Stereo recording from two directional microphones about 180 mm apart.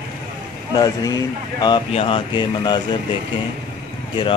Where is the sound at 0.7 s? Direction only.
20° left (ahead or behind).